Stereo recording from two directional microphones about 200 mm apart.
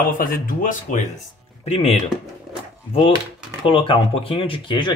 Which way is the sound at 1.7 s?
30° left (ahead or behind).